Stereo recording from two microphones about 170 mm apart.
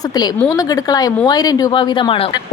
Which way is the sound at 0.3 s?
20° left (ahead or behind).